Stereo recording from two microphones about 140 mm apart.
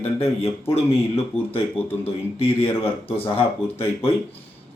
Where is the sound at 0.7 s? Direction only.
45° left (ahead or behind).